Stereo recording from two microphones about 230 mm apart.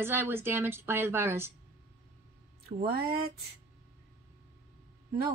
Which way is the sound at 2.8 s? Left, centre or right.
Right.